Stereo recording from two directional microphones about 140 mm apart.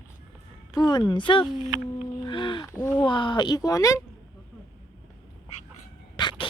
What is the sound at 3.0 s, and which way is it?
Speech, 35° left (ahead or behind).